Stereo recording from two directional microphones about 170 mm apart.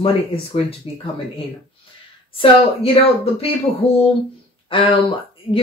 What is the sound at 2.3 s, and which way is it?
Speech, 35° left (ahead or behind).